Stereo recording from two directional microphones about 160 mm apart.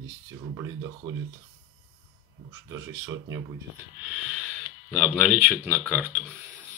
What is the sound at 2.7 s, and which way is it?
Speech, 20° right (ahead or behind).